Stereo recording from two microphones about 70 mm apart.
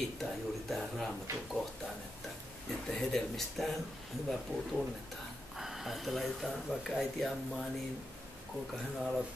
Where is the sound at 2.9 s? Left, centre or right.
Centre.